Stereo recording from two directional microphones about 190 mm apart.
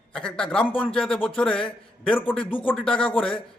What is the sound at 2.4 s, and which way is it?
Speech, 25° left (ahead or behind).